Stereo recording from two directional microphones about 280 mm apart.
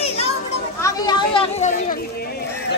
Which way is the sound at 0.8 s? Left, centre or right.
Centre.